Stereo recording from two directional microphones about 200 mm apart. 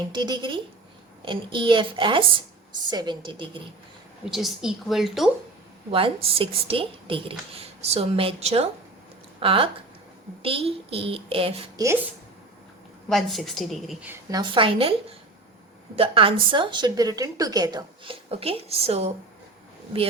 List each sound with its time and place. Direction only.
0.1 s a woman's voice: 20° right (ahead or behind)
4.3 s a woman's voice: centre (ahead or behind)
5.9 s a woman's voice: 25° right (ahead or behind)
13.1 s a woman's voice: centre (ahead or behind)
14.1 s a woman's voice: 20° right (ahead or behind)
16.0 s a woman's voice: 25° right (ahead or behind)